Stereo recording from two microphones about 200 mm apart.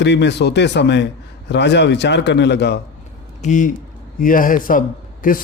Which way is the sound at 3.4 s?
40° left (ahead or behind).